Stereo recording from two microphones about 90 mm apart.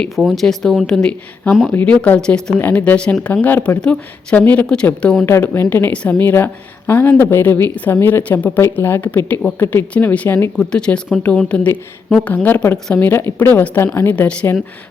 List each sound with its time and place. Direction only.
0.0 s speech: centre (ahead or behind)
1.7 s speech: 15° left (ahead or behind)
5.2 s a woman's voice: 25° left (ahead or behind)
10.6 s speech: 10° left (ahead or behind)
12.3 s a woman's voice: 20° left (ahead or behind)